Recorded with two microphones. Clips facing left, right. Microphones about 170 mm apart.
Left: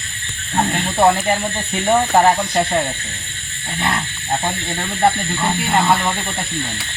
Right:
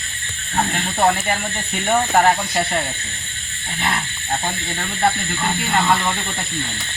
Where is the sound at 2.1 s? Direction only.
25° left (ahead or behind).